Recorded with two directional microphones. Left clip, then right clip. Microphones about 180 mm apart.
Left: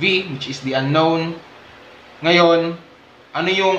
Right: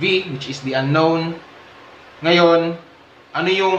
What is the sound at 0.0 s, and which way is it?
A man's voice, 10° left (ahead or behind).